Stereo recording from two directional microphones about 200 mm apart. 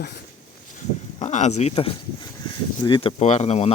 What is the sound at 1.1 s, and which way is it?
Speech, 35° left (ahead or behind).